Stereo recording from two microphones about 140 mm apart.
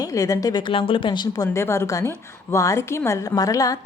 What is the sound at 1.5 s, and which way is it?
A woman's voice, 20° left (ahead or behind).